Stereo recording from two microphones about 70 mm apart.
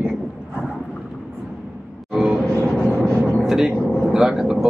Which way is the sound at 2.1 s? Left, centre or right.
Centre.